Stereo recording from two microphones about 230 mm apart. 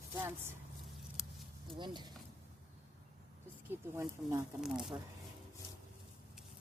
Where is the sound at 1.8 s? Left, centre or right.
Centre.